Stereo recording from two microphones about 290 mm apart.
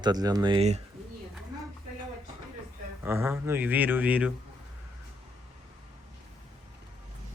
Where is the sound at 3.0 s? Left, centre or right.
Centre.